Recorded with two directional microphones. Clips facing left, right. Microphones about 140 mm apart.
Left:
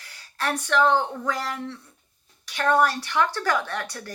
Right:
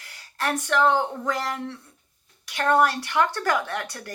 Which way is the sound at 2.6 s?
20° right (ahead or behind).